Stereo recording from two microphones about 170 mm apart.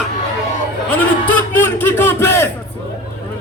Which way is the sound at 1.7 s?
15° left (ahead or behind).